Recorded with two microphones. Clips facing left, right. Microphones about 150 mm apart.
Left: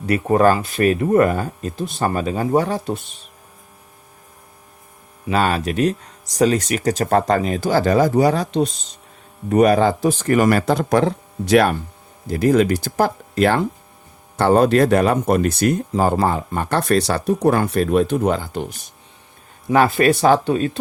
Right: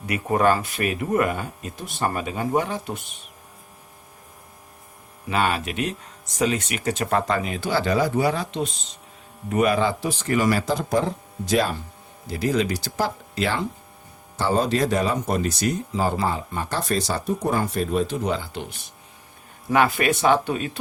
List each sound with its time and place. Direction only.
0.0 s speech: 35° left (ahead or behind)
1.7 s speech: 20° left (ahead or behind)
2.0 s speech: 35° left (ahead or behind)
5.3 s speech: 40° left (ahead or behind); by 11.8 s 65° left (ahead or behind)
12.3 s speech: 50° left (ahead or behind)
14.3 s speech: 60° left (ahead or behind); by 18.8 s 45° left (ahead or behind)
19.7 s speech: 35° left (ahead or behind)